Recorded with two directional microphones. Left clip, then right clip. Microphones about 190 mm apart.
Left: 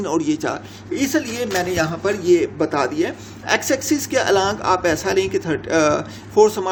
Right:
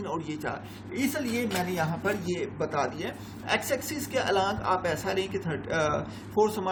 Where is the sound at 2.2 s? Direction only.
55° left (ahead or behind).